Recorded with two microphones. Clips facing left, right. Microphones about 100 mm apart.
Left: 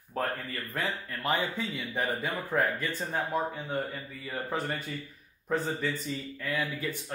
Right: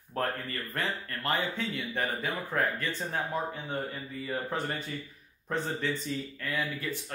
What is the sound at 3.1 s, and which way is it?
Speech, centre (ahead or behind).